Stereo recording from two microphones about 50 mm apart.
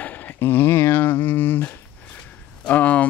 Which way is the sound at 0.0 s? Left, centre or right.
Left.